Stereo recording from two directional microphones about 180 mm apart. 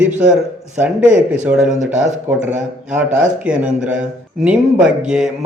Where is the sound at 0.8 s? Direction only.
10° right (ahead or behind).